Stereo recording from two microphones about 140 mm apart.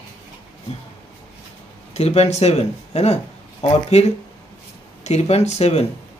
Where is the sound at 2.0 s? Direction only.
50° left (ahead or behind).